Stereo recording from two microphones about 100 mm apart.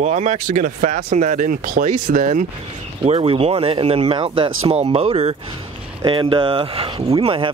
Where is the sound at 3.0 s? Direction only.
80° right.